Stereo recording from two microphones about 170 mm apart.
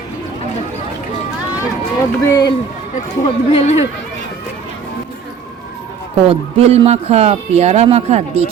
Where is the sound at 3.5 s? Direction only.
40° left (ahead or behind).